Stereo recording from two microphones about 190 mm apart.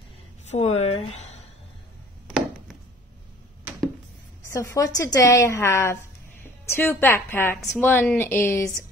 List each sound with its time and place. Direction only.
0.5 s a woman's voice: 35° left (ahead or behind)
2.2 s chopping: 5° right (ahead or behind)
4.5 s a woman's voice: 15° left (ahead or behind)